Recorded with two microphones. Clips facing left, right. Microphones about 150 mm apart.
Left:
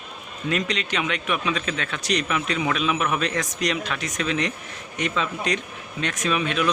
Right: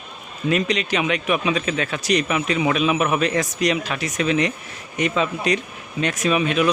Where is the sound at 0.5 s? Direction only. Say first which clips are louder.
Right 5 dB; 5° right (ahead or behind).